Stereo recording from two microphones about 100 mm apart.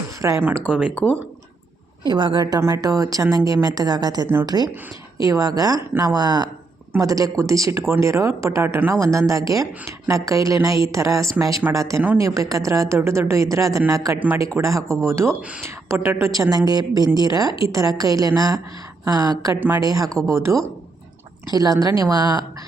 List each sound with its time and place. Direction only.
0.2 s speech: 30° right (ahead or behind)
0.7 s speech: 15° right (ahead or behind)
0.9 s speech: 15° left (ahead or behind)
2.0 s a woman's voice: 45° right (ahead or behind)
19.5 s speech: 20° right (ahead or behind)
19.8 s speech: 40° right (ahead or behind)
20.1 s speech: 5° left (ahead or behind)
20.3 s speech: 30° right (ahead or behind)
21.5 s speech: 40° right (ahead or behind)